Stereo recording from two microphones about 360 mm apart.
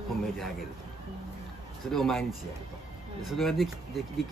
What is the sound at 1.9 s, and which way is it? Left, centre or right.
Speech, centre.